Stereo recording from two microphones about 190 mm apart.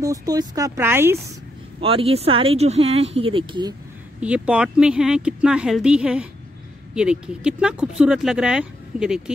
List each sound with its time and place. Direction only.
0.0 s speech: 20° right (ahead or behind)
1.8 s speech: 30° right (ahead or behind)
4.2 s speech: 5° right (ahead or behind)